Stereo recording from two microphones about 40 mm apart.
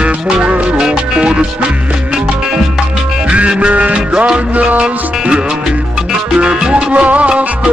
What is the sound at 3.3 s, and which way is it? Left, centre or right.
Music, right.